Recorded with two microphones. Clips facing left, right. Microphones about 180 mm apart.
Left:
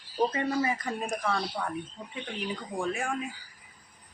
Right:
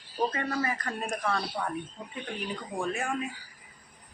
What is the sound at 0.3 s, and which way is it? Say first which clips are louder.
Speech: left 3 dB; 20° left (ahead or behind).